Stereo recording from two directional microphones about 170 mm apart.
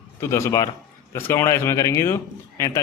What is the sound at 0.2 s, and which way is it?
Speech, 15° left (ahead or behind).